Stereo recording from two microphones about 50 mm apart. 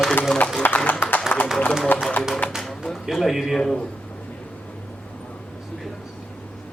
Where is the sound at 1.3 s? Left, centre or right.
Left.